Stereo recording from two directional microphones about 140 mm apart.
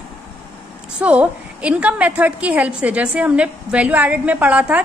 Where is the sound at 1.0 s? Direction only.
10° right (ahead or behind).